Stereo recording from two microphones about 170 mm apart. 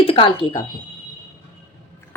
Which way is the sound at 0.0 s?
35° left (ahead or behind).